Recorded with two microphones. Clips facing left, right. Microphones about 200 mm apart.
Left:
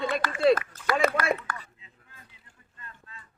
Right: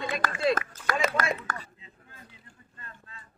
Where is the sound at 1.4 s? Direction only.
40° right (ahead or behind).